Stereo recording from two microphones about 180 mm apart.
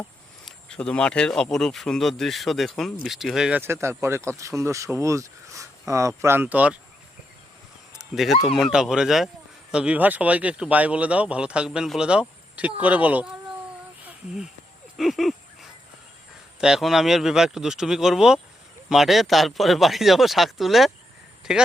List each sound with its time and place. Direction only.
0.4 s speech: 5° left (ahead or behind)
3.6 s speech: 15° right (ahead or behind)
7.9 s a sound: centre (ahead or behind)
8.5 s speech: centre (ahead or behind)
14.0 s a sound: 5° right (ahead or behind)
14.9 s speech: centre (ahead or behind)
16.6 s speech: 5° right (ahead or behind)